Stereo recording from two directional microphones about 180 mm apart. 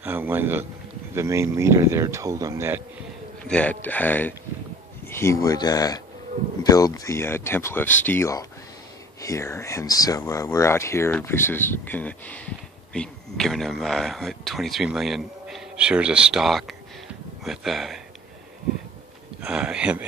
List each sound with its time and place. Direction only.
0.0 s a sound: 10° right (ahead or behind)
1.1 s speech: 15° right (ahead or behind)
3.4 s a man's voice: 5° left (ahead or behind)
19.4 s a man's voice: 5° right (ahead or behind)